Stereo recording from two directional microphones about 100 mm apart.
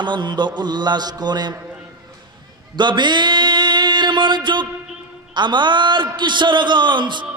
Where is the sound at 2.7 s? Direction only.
50° right (ahead or behind).